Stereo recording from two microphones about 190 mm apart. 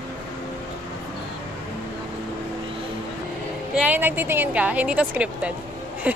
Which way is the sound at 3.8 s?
10° right (ahead or behind).